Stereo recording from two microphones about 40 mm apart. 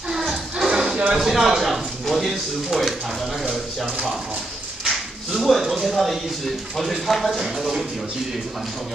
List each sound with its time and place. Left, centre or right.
0.3 s music: centre
1.1 s a sound: centre
4.8 s speech: centre
7.3 s speech: centre